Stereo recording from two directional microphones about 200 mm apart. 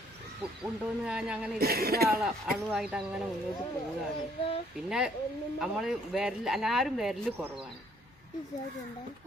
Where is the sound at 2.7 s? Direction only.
5° right (ahead or behind).